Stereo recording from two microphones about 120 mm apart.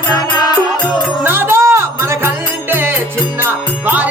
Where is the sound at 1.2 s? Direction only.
20° right (ahead or behind).